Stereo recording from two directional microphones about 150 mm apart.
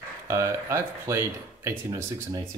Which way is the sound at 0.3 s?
20° right (ahead or behind).